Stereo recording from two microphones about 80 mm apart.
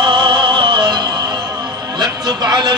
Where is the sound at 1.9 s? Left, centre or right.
Right.